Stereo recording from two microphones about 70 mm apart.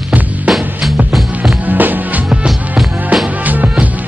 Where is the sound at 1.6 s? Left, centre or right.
Right.